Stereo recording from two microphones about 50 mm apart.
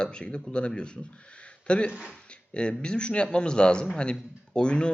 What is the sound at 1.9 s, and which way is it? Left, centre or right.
Speech, centre.